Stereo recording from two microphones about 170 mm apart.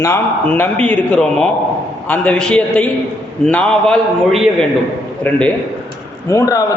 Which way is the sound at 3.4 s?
5° left (ahead or behind).